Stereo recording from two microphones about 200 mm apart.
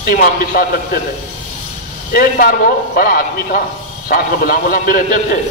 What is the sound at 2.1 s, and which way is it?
A man's voice, 45° left (ahead or behind).